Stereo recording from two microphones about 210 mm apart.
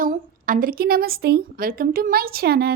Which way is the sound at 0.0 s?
40° right (ahead or behind).